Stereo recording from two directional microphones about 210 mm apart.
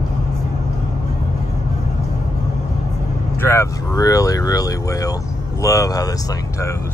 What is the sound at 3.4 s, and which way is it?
Speech, 15° left (ahead or behind).